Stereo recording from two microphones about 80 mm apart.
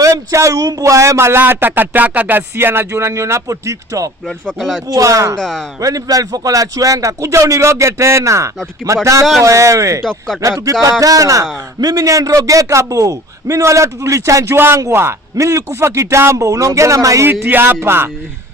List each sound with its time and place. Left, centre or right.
0.0 s speech: right
4.6 s speech: centre
4.9 s speech: right
5.4 s speech: centre
5.8 s speech: right
10.0 s speech: centre
10.7 s speech: right
17.4 s speech: right